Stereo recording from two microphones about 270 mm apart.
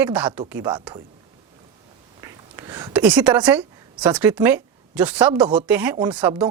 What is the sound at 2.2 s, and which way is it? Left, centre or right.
A woman's voice, centre.